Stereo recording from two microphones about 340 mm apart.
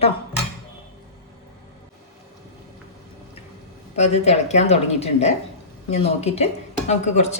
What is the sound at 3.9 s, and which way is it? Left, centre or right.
Speech, centre.